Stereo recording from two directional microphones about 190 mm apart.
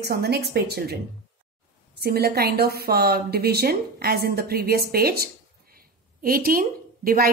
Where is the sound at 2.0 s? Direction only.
55° right (ahead or behind).